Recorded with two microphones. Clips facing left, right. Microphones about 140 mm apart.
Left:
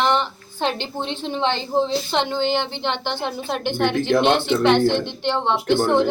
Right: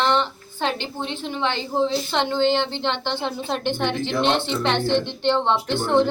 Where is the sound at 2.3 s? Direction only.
15° left (ahead or behind).